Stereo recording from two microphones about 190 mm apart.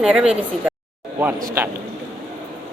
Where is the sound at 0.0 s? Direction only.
5° right (ahead or behind).